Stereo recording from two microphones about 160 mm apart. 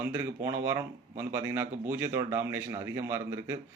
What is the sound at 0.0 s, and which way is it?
Speech, 15° right (ahead or behind).